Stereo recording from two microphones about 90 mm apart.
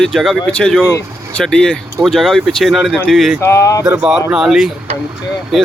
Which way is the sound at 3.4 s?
35° left (ahead or behind).